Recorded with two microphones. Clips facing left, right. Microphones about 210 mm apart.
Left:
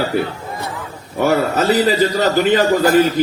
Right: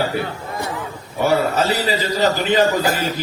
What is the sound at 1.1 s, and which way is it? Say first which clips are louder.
Speech: left 2 dB; 50° left (ahead or behind).